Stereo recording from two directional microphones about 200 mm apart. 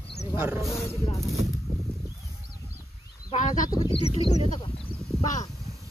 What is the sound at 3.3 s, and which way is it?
Speech, 40° left (ahead or behind).